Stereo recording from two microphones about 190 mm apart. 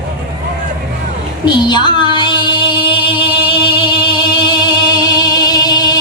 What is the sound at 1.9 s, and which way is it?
Music, 25° left (ahead or behind).